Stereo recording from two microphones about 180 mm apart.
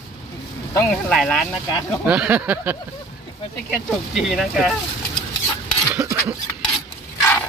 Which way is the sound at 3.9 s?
Centre (ahead or behind).